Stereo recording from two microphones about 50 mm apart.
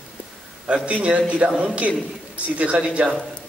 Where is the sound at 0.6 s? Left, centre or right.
Right.